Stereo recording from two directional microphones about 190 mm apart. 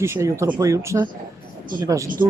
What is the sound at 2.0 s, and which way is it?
Speech, 45° right (ahead or behind).